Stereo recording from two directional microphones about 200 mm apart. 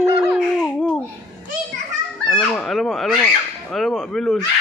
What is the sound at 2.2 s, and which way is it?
Speech, centre (ahead or behind).